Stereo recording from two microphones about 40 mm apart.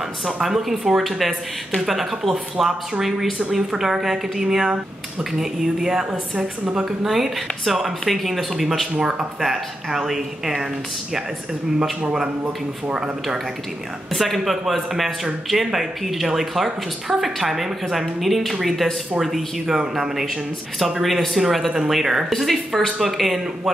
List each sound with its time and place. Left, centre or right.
0.4 s a woman's voice: centre
6.3 s a woman's voice: right
7.0 s a woman's voice: centre
12.9 s a woman's voice: centre
14.1 s a woman's voice: centre
20.8 s a woman's voice: centre